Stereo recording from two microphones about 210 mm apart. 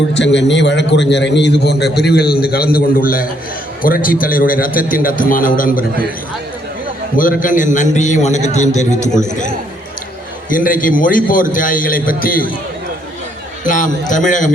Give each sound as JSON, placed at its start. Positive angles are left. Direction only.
{"t": 0.1, "sound": "a man's voice", "side_deg": 55}
{"t": 7.2, "sound": "a man's voice", "side_deg": 40}
{"t": 13.7, "sound": "a man's voice", "side_deg": 40}